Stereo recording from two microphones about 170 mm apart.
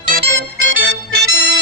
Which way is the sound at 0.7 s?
70° right (ahead or behind).